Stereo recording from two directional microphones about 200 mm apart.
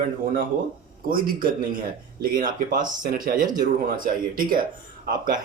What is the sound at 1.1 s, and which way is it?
Speech, 45° right (ahead or behind).